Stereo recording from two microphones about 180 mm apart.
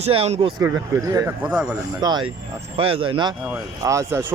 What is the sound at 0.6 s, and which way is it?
Speech, 10° right (ahead or behind).